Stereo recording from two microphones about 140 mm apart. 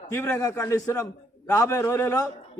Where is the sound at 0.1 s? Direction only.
15° left (ahead or behind).